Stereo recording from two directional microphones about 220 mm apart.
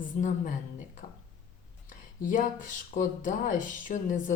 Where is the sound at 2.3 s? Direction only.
35° left (ahead or behind).